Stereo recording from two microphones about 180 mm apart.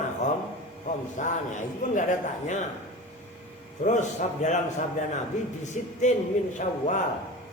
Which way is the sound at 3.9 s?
40° left (ahead or behind).